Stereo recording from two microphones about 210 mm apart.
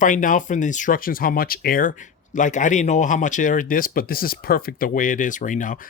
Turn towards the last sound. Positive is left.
turn(degrees=40)  # may be behind; listen again after turning